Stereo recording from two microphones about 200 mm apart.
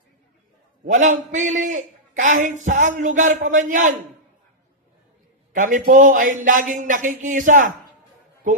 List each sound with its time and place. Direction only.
0.9 s speech: 40° right (ahead or behind)
5.5 s speech: 40° right (ahead or behind)